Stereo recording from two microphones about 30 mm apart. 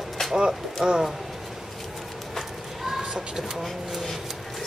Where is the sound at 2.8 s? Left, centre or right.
Centre.